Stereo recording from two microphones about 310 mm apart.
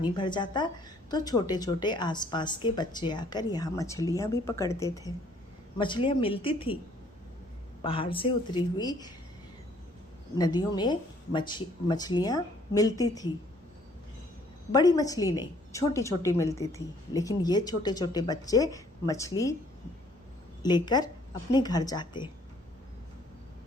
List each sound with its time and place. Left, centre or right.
0.2 s a woman's voice: centre
7.9 s a woman's voice: centre
10.3 s a woman's voice: centre
14.7 s a woman's voice: centre
20.6 s a woman's voice: centre